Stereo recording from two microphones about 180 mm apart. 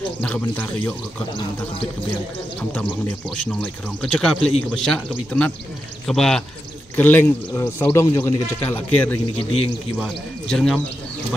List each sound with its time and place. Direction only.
0.2 s a man's voice: 5° left (ahead or behind)
3.6 s a man's voice: 5° left (ahead or behind)
9.4 s a man's voice: 35° left (ahead or behind)
9.9 s speech: 5° left (ahead or behind)